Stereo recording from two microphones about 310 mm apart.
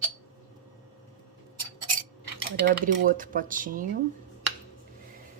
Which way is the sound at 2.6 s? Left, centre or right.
Right.